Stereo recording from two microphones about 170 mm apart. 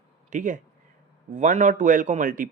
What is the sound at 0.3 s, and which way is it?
A man's voice, 45° right (ahead or behind).